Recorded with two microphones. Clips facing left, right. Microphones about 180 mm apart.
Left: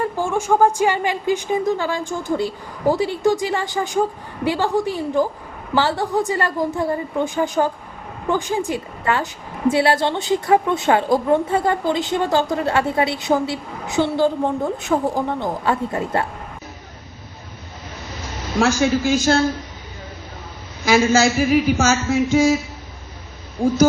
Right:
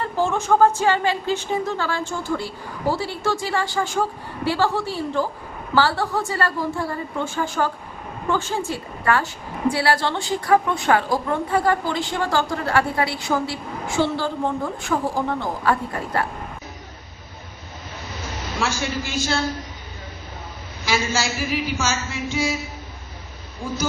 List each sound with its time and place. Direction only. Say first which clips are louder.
0.0 s a woman's voice: left 1 dB; 10° left (ahead or behind)
18.6 s a man's voice: left 9 dB; 45° left (ahead or behind)
20.8 s a man's voice: left 8 dB; 50° left (ahead or behind)
23.6 s hoot: left 11 dB; 35° left (ahead or behind)